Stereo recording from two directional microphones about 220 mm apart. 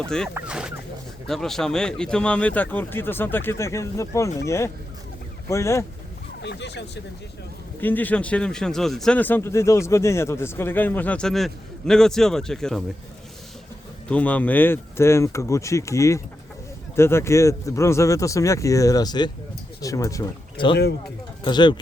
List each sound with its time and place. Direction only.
0.3 s speech: 5° right (ahead or behind); by 5.8 s 15° left (ahead or behind)
6.4 s speech: 50° left (ahead or behind)
7.8 s speech: 10° left (ahead or behind)
14.1 s speech: 5° left (ahead or behind)